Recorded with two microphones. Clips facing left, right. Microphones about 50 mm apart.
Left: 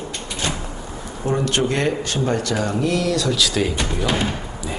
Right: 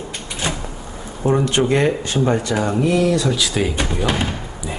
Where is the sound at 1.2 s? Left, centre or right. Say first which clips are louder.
Right 3 dB; right.